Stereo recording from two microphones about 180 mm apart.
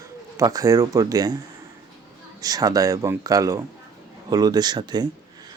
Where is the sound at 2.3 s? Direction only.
20° right (ahead or behind).